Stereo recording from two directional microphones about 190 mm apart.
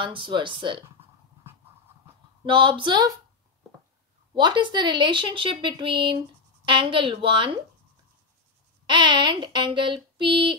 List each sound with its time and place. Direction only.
0.0 s speech: 25° right (ahead or behind)
2.4 s speech: 25° right (ahead or behind)
4.4 s speech: 25° right (ahead or behind)
8.8 s speech: 25° right (ahead or behind)